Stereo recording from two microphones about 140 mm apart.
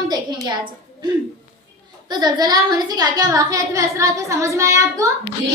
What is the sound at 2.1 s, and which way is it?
A woman's voice, 30° right (ahead or behind).